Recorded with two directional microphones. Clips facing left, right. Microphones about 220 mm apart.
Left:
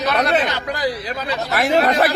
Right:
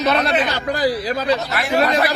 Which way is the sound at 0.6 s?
35° right (ahead or behind).